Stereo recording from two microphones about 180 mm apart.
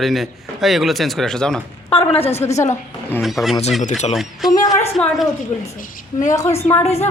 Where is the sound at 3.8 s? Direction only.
40° left (ahead or behind).